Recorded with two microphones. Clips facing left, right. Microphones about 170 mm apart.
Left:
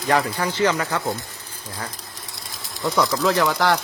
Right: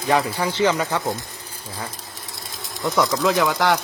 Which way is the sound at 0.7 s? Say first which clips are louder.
Right 1 dB; 15° right (ahead or behind).